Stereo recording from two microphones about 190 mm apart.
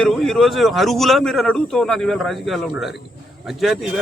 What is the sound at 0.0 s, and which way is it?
A man's voice, centre (ahead or behind).